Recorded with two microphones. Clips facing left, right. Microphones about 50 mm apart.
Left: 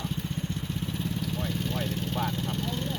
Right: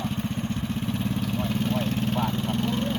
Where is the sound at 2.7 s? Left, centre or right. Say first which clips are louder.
Right 6 dB; right.